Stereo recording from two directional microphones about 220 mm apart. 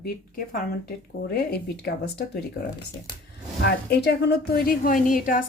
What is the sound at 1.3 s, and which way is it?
Speech, 45° left (ahead or behind).